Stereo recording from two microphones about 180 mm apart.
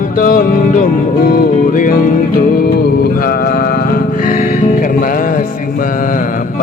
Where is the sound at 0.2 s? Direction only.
55° left (ahead or behind).